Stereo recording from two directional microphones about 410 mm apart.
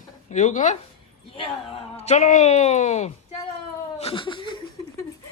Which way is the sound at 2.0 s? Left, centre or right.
Centre.